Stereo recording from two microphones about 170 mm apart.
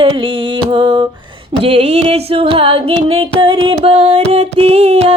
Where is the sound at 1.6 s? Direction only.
35° right (ahead or behind).